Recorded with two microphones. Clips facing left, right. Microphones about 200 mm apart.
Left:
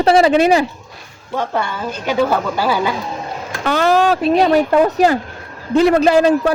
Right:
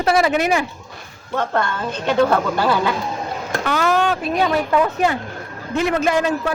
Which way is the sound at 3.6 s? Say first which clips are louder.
Left 5 dB; 35° left (ahead or behind).